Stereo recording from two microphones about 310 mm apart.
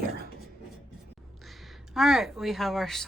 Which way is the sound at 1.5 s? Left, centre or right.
Centre.